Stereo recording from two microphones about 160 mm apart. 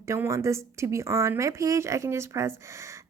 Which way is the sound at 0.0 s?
20° right (ahead or behind).